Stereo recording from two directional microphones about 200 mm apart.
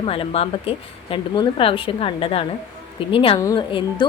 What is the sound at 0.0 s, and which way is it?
A woman's voice, 30° left (ahead or behind).